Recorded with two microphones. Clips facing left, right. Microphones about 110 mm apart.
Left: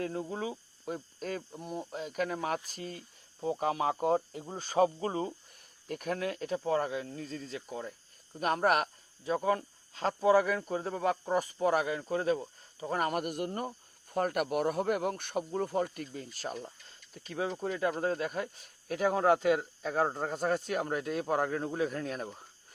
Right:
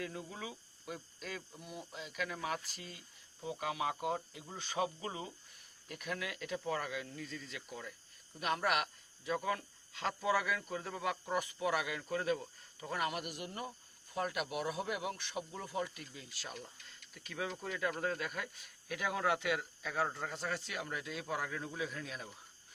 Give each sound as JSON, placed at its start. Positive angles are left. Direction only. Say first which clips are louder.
{"t": 0.0, "sound": "speech", "louder": "left 9 dB", "side_deg": 40}